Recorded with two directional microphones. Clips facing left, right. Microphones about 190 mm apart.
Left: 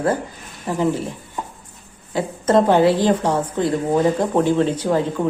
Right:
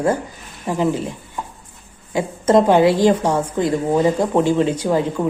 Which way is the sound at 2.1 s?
15° right (ahead or behind).